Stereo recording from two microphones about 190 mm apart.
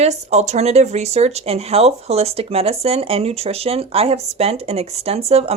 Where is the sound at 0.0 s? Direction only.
35° right (ahead or behind).